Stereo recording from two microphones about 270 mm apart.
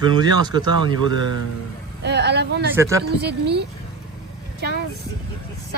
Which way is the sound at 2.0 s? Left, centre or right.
Right.